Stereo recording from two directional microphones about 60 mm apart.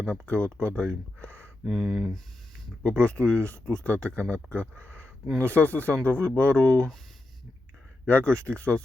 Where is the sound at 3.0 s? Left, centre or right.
Centre.